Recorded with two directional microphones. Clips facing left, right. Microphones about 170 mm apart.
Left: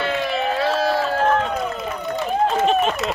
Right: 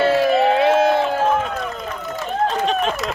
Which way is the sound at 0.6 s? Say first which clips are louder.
Right 5 dB; 20° right (ahead or behind).